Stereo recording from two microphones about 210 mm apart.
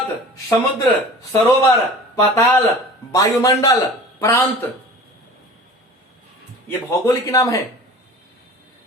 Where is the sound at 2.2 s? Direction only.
15° left (ahead or behind).